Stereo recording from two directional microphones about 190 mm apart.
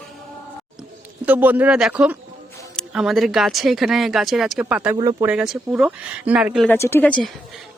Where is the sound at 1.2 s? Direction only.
10° right (ahead or behind).